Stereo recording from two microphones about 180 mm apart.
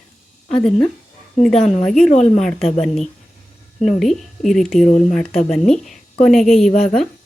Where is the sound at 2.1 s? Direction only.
40° left (ahead or behind).